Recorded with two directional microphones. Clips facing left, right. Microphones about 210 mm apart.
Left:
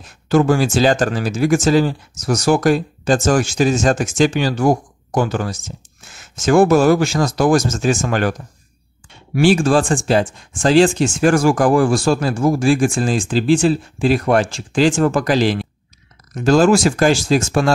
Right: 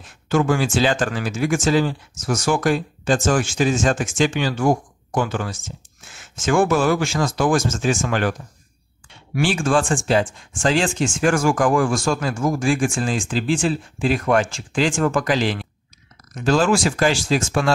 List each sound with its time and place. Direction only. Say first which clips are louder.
0.0 s speech: left 5 dB; 35° left (ahead or behind)